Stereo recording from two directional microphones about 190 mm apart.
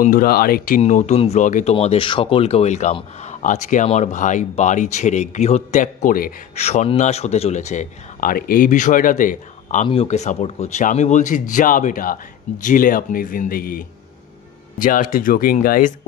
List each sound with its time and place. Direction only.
0.0 s speech: 50° left (ahead or behind)
6.6 s speech: 35° left (ahead or behind)